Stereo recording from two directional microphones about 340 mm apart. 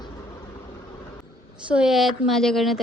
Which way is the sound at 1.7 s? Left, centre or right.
Centre.